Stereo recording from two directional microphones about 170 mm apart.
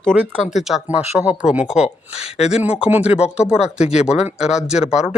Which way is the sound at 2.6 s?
10° right (ahead or behind).